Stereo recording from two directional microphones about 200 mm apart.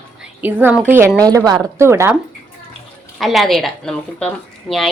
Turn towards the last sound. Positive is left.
turn(degrees=0)  # may be behind; listen again after turning